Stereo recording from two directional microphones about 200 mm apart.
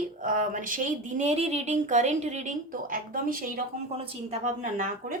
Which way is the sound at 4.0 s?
30° right (ahead or behind).